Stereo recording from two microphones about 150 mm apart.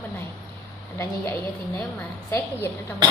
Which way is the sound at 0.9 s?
15° left (ahead or behind).